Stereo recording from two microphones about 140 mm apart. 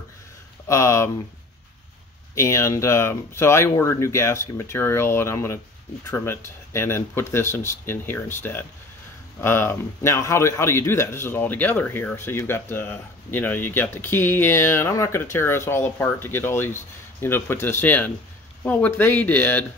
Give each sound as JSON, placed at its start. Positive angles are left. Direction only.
{"t": 0.7, "sound": "speech", "side_deg": 20}
{"t": 2.3, "sound": "a man's voice", "side_deg": 20}